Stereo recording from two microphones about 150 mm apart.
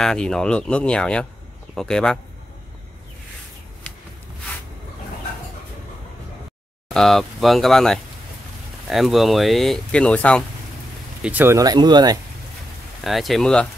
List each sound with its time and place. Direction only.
0.0 s speech: 5° left (ahead or behind)
6.9 s speech: centre (ahead or behind)
11.2 s speech: 15° right (ahead or behind)
13.0 s speech: centre (ahead or behind)